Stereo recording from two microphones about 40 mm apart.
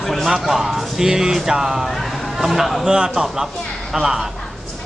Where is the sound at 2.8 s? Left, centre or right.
Right.